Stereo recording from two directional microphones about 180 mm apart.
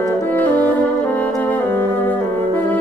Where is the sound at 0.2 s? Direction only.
10° left (ahead or behind).